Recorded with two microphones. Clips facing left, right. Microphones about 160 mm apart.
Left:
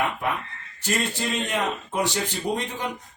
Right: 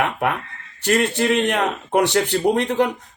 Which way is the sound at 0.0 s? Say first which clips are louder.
Right 5 dB; 65° right (ahead or behind).